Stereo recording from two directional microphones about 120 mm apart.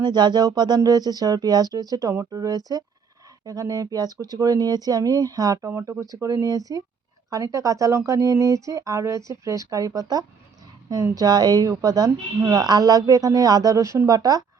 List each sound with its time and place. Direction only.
0.0 s a woman's voice: 35° right (ahead or behind)